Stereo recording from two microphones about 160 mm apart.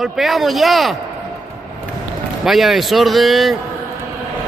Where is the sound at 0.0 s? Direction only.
Centre (ahead or behind).